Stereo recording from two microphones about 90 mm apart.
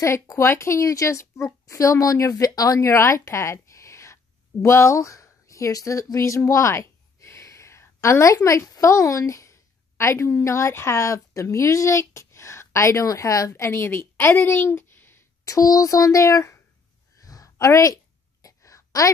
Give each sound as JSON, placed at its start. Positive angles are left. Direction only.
{"t": 0.0, "sound": "speech", "side_deg": 30}
{"t": 15.4, "sound": "speech", "side_deg": 40}
{"t": 17.2, "sound": "a sound", "side_deg": 40}